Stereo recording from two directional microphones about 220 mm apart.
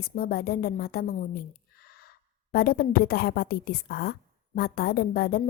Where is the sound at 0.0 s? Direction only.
45° left (ahead or behind).